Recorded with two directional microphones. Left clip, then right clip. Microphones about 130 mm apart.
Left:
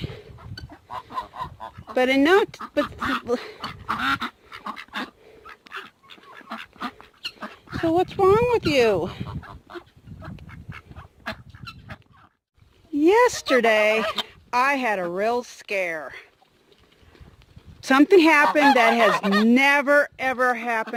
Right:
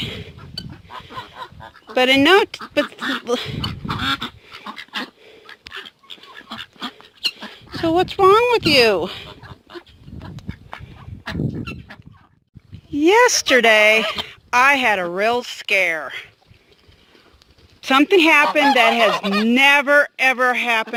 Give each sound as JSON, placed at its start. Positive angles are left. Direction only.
{"t": 0.0, "sound": "a sound", "side_deg": -10}
{"t": 1.1, "sound": "goose", "side_deg": 50}
{"t": 2.0, "sound": "speech", "side_deg": 0}
{"t": 3.8, "sound": "duck", "side_deg": 0}
{"t": 4.9, "sound": "dog", "side_deg": 0}
{"t": 5.7, "sound": "chicken", "side_deg": 0}
{"t": 6.8, "sound": "dog", "side_deg": 5}
{"t": 7.8, "sound": "speech", "side_deg": 0}
{"t": 12.9, "sound": "speech", "side_deg": 5}
{"t": 17.7, "sound": "speech", "side_deg": 35}
{"t": 18.8, "sound": "speech", "side_deg": 20}
{"t": 19.1, "sound": "fowl", "side_deg": -10}
{"t": 19.5, "sound": "speech", "side_deg": 25}
{"t": 19.9, "sound": "speech", "side_deg": 0}